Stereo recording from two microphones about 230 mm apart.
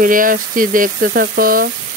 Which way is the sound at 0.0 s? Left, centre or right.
Right.